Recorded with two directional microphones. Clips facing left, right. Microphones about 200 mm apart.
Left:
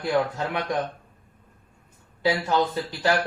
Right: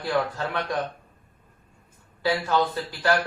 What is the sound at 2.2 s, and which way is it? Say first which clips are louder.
Speech: left 1 dB; 15° left (ahead or behind).